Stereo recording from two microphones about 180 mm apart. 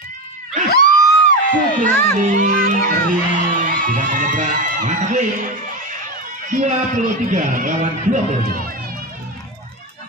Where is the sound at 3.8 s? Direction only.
45° right (ahead or behind).